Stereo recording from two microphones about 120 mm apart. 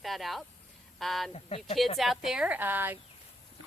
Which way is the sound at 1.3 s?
60° left (ahead or behind).